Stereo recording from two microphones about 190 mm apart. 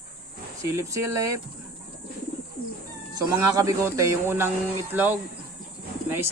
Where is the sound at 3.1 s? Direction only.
20° right (ahead or behind).